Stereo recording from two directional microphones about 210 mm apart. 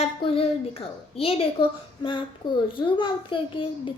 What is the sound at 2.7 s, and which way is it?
A child's voice, 25° left (ahead or behind).